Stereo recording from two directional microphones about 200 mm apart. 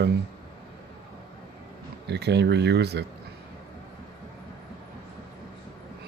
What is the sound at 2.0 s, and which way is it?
Speech, 55° right (ahead or behind).